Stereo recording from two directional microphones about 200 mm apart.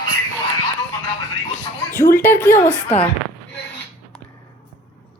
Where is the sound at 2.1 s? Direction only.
10° left (ahead or behind).